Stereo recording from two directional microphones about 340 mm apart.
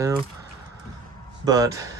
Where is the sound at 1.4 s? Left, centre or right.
Centre.